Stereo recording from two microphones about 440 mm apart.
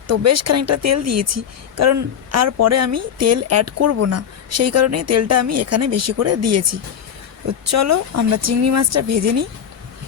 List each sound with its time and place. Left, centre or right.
0.1 s speech: right